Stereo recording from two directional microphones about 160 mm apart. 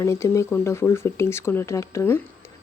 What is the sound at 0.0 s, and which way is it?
Speech, 20° left (ahead or behind).